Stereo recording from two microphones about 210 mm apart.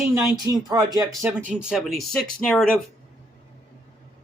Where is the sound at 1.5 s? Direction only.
5° right (ahead or behind).